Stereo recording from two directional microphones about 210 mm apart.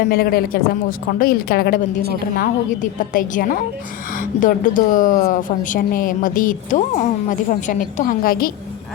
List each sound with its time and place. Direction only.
0.0 s a woman's voice: 45° left (ahead or behind)